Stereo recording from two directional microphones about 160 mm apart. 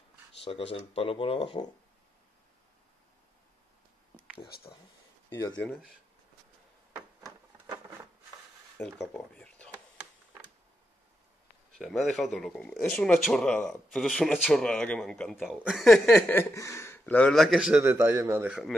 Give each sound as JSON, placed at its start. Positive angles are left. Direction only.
{"t": 0.4, "sound": "speech", "side_deg": 35}
{"t": 5.6, "sound": "speech", "side_deg": 5}
{"t": 7.2, "sound": "printer", "side_deg": -20}
{"t": 8.7, "sound": "speech", "side_deg": 0}
{"t": 11.8, "sound": "speech", "side_deg": 0}
{"t": 18.0, "sound": "a man's voice", "side_deg": -20}